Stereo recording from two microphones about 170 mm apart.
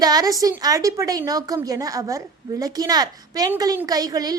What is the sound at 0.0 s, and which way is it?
A woman's voice, 20° right (ahead or behind).